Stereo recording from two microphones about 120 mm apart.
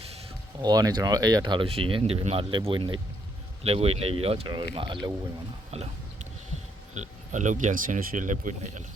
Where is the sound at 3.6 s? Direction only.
55° right (ahead or behind); by 5.1 s 40° right (ahead or behind).